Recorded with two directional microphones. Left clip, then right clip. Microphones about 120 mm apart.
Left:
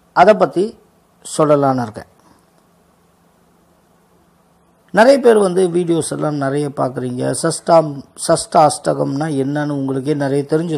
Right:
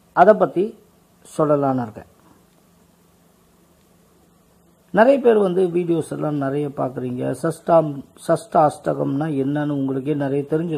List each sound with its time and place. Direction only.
0.1 s speech: 10° left (ahead or behind); by 2.0 s 30° left (ahead or behind)
4.9 s speech: 15° left (ahead or behind)